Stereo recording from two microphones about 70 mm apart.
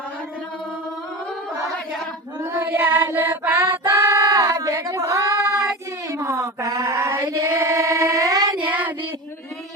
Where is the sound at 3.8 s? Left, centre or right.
Right.